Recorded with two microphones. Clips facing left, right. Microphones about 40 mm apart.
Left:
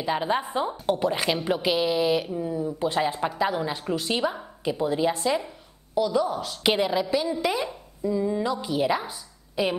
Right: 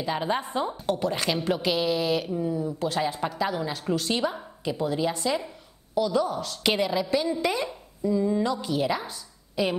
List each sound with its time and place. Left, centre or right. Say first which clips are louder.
0.0 s a woman's voice: left 2 dB; centre